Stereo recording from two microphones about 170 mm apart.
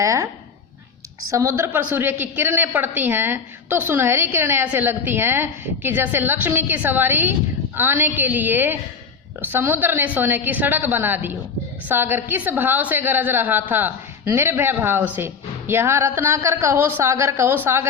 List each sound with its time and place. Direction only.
0.0 s speech: 20° right (ahead or behind)
1.3 s a woman's voice: 20° right (ahead or behind)